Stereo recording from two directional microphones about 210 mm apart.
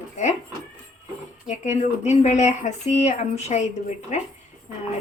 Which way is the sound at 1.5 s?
35° left (ahead or behind).